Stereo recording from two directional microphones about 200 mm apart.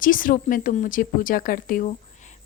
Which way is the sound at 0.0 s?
45° left (ahead or behind).